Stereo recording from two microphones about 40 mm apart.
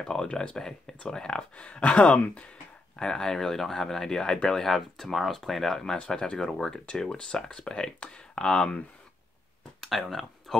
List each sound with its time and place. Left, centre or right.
0.0 s speech: centre
0.6 s speech: centre
1.0 s speech: left
3.0 s speech: centre
9.8 s speech: centre